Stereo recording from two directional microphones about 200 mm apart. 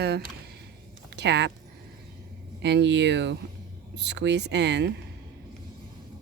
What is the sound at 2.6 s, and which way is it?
Speech, 60° right (ahead or behind).